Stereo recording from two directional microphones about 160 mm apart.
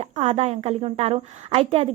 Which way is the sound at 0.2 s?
40° right (ahead or behind).